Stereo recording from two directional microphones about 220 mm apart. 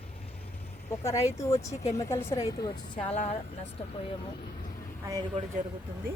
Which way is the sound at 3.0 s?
30° left (ahead or behind).